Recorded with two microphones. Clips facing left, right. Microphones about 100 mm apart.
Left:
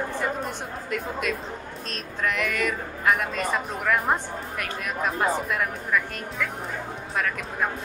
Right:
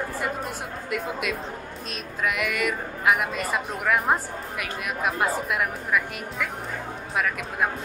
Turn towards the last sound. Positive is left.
turn(degrees=-5)  # may be behind; listen again after turning